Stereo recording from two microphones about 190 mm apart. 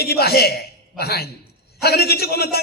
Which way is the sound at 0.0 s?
55° left (ahead or behind).